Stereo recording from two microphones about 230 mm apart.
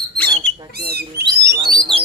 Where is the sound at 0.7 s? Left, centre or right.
Right.